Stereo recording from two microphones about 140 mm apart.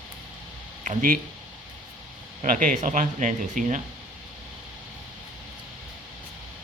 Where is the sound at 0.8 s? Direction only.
90° right.